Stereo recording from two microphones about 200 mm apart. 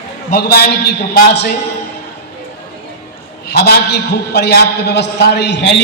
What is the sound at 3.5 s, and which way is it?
A man's voice, 55° left (ahead or behind).